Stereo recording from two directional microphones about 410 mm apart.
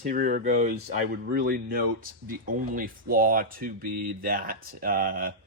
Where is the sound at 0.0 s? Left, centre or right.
Centre.